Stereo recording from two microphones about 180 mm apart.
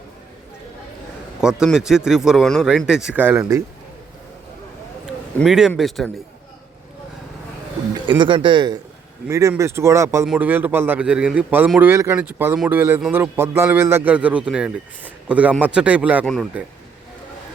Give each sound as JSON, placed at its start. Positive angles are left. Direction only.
{"t": 1.4, "sound": "a man's voice", "side_deg": -5}
{"t": 5.4, "sound": "a man's voice", "side_deg": -5}
{"t": 8.2, "sound": "a man's voice", "side_deg": -25}